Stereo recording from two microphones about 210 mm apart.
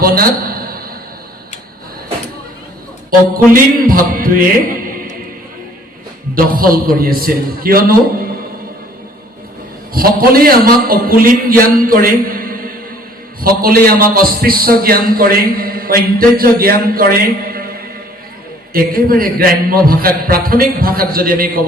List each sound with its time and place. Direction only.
0.0 s a sound: 45° right (ahead or behind)
3.1 s a man's voice: 40° right (ahead or behind)
6.3 s a man's voice: 45° right (ahead or behind)
9.9 s a man's voice: 45° right (ahead or behind)